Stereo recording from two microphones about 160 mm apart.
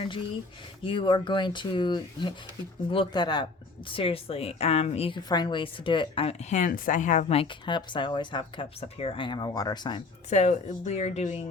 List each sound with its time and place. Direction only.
0.8 s a woman's voice: 30° left (ahead or behind)
10.2 s speech: 45° left (ahead or behind)